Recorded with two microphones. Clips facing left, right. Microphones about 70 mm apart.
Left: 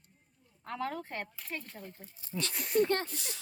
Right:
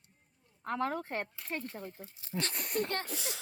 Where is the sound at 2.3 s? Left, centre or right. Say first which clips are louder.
Left 5 dB; right.